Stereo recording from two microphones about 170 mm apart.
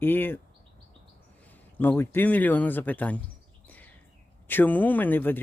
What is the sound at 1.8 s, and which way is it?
Speech, 15° left (ahead or behind).